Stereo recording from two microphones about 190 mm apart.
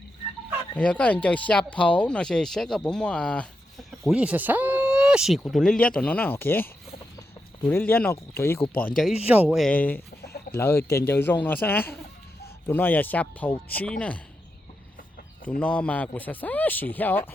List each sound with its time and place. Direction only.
0.8 s speech: 5° left (ahead or behind)
4.0 s speech: 5° right (ahead or behind); by 8.6 s 15° left (ahead or behind)
9.2 s speech: 5° right (ahead or behind); by 10.0 s 10° left (ahead or behind)
10.2 s chicken: 55° left (ahead or behind)
10.5 s speech: 15° left (ahead or behind)
15.4 s speech: 10° left (ahead or behind)